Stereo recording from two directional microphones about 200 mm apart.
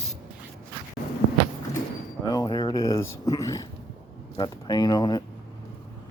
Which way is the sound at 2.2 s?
20° left (ahead or behind).